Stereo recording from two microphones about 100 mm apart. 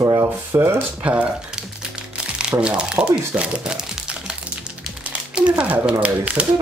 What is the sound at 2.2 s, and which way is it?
Crumpling, 10° right (ahead or behind).